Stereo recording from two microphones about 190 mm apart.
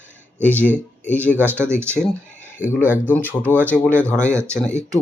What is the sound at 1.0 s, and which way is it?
Speech, 10° left (ahead or behind).